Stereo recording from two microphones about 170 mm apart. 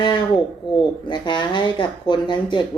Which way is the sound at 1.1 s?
25° left (ahead or behind).